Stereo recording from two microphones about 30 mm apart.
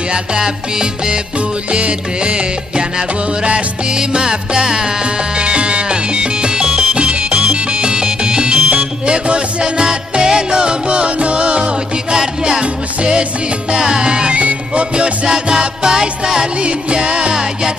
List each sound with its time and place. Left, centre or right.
0.1 s music: right
1.7 s music: right
3.9 s music: right
12.2 s music: right
13.7 s music: right
14.3 s music: right
15.2 s music: right
16.6 s music: right